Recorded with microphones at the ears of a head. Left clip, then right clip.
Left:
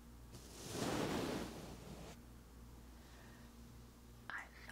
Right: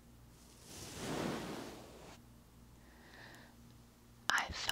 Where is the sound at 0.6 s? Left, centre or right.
Left.